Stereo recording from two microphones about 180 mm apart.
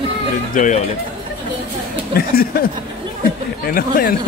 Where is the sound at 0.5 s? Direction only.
45° left (ahead or behind).